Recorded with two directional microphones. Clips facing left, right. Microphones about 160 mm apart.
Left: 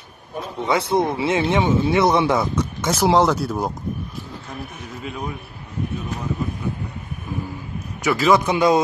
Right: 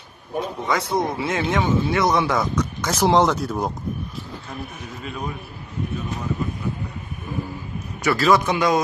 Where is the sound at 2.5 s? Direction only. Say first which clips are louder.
Even; 25° left (ahead or behind).